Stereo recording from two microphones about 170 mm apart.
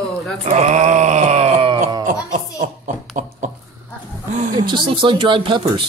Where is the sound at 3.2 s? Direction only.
50° right (ahead or behind).